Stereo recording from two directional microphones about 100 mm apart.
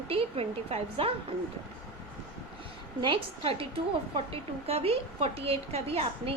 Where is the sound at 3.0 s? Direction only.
60° right (ahead or behind).